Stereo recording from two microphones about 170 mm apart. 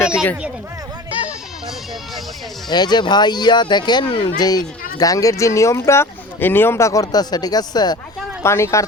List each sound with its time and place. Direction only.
0.0 s speech: 15° left (ahead or behind)
2.6 s speech: 25° left (ahead or behind)